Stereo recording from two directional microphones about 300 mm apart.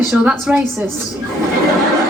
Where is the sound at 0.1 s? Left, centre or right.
Centre.